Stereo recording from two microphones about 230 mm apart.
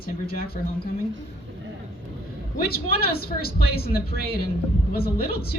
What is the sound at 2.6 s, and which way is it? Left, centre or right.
A woman's voice, left.